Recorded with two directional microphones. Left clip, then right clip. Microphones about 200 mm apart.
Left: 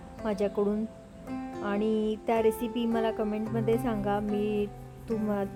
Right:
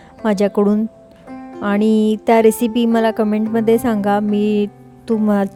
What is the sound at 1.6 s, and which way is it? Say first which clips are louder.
Speech: right 13 dB; 50° right (ahead or behind).